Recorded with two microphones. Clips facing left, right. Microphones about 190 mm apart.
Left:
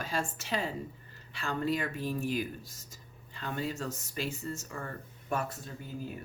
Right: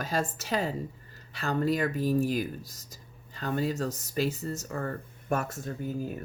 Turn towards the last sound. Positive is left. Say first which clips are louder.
# right 8 dB
turn(degrees=-45)  # may be behind; listen again after turning